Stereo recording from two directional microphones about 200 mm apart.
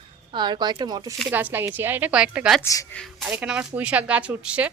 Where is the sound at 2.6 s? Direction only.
15° left (ahead or behind).